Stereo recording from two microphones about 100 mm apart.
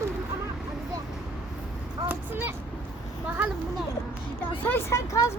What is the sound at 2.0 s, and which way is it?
Speech, 20° right (ahead or behind).